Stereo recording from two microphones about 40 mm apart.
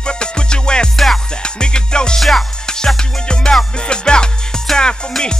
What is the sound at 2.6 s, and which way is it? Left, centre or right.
Music, centre.